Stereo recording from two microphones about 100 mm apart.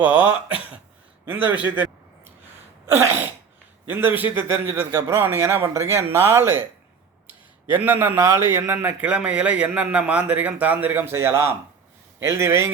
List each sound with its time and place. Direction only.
0.0 s a man's voice: 15° right (ahead or behind)
3.8 s a man's voice: 20° right (ahead or behind)
7.7 s a man's voice: 20° right (ahead or behind)